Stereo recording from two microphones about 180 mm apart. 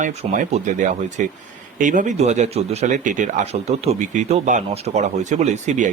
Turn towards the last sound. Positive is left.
turn(degrees=-40)  # may be behind; listen again after turning